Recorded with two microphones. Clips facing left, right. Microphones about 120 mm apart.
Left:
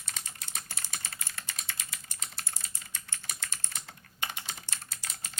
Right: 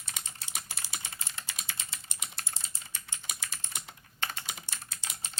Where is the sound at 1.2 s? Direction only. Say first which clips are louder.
Even; 25° right (ahead or behind).